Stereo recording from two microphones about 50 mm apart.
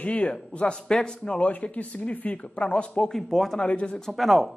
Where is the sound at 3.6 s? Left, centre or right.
Left.